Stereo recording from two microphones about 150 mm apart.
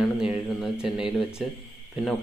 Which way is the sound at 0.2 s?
5° right (ahead or behind).